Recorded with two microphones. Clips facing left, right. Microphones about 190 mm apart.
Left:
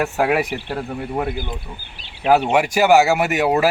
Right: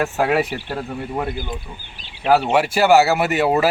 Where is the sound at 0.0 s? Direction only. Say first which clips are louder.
Even; 10° left (ahead or behind).